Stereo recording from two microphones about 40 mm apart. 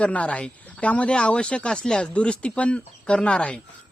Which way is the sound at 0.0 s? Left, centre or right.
Left.